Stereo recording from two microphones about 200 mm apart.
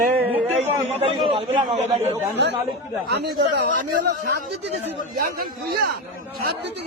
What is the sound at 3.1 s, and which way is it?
Speech, 55° right (ahead or behind).